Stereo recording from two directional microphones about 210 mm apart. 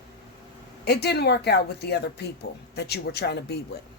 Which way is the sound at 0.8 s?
50° left (ahead or behind).